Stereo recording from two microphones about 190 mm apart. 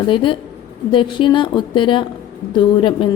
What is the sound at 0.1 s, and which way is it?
A woman's voice, 25° left (ahead or behind).